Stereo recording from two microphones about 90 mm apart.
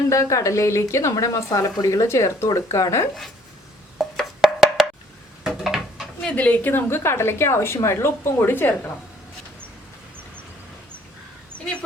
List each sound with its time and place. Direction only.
0.1 s a woman's voice: 35° left (ahead or behind)
3.9 s wood block: centre (ahead or behind)
5.4 s a sound: 5° right (ahead or behind)
6.2 s a woman's voice: 15° left (ahead or behind)